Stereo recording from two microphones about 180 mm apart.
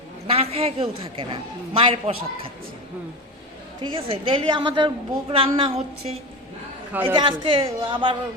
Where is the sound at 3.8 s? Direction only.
30° right (ahead or behind).